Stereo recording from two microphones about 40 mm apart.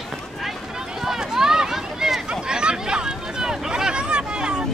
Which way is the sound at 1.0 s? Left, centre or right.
Centre.